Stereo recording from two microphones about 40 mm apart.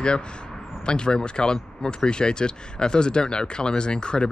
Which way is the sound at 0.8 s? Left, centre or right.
Left.